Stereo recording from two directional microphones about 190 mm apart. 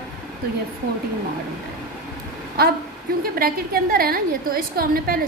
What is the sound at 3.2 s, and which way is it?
A woman's voice, 50° right (ahead or behind).